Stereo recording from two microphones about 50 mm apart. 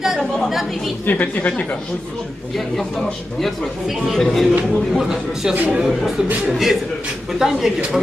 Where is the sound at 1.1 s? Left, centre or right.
Left.